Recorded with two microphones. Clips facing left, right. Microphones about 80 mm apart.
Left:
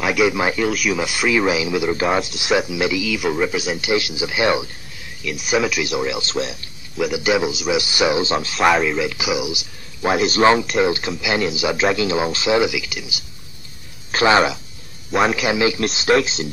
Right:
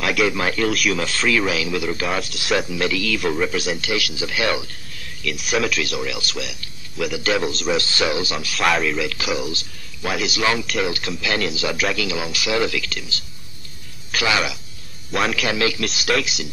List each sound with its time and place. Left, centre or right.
0.0 s speech: centre
0.3 s a man's voice: centre
0.7 s speech: centre
0.9 s a man's voice: centre
3.8 s speech: left
5.3 s speech: centre
5.7 s speech: centre
7.1 s a man's voice: centre
8.5 s a man's voice: centre
10.1 s a man's voice: left; by 13.2 s centre
14.1 s speech: left
15.0 s a man's voice: centre
15.3 s speech: centre